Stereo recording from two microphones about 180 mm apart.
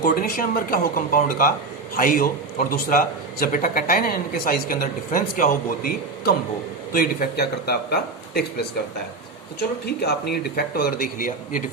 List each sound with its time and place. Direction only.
0.0 s a man's voice: 50° left (ahead or behind)
9.8 s a man's voice: 65° left (ahead or behind)